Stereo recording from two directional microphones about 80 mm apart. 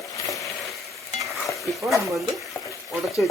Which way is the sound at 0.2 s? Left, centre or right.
Left.